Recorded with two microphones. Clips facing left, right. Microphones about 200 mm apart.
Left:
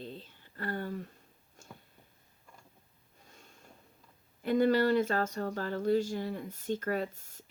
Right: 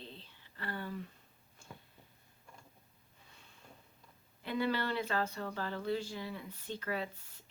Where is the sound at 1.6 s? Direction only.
45° left (ahead or behind).